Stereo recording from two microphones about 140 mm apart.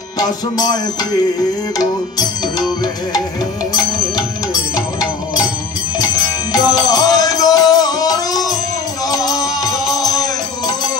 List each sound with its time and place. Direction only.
0.2 s music: 30° left (ahead or behind)
1.8 s music: 30° left (ahead or behind)
5.9 s music: 25° left (ahead or behind)